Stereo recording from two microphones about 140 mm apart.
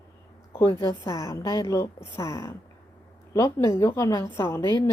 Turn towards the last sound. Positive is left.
turn(degrees=25)  # may be behind; listen again after turning